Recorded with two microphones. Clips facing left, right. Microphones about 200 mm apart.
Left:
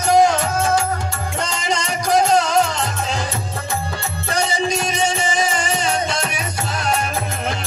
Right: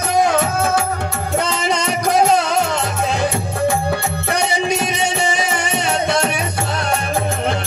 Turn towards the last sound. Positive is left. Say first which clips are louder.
# right 2 dB
turn(degrees=-65)  # may be behind; listen again after turning